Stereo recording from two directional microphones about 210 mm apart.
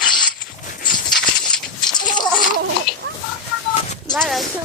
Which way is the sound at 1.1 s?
Centre (ahead or behind).